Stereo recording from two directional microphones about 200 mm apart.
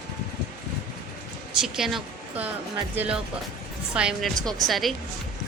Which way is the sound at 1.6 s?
Centre (ahead or behind).